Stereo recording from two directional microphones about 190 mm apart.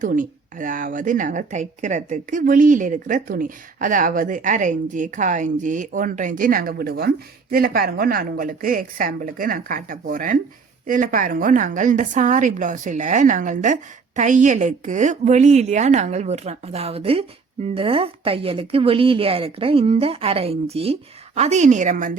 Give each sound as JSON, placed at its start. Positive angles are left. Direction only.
{"t": 0.0, "sound": "a woman's voice", "side_deg": -45}